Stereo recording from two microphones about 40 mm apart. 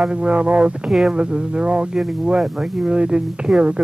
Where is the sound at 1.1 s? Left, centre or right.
Right.